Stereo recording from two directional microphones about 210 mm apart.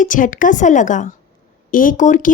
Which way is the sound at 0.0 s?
40° left (ahead or behind).